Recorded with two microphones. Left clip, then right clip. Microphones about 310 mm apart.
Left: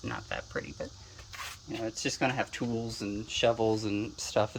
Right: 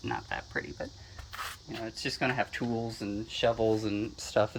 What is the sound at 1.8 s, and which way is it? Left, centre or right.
Speech, centre.